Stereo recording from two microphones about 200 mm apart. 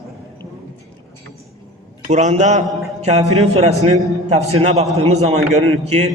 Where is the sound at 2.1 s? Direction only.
35° right (ahead or behind).